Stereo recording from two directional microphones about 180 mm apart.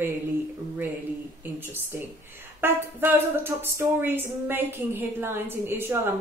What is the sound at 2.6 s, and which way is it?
Speech, 10° right (ahead or behind).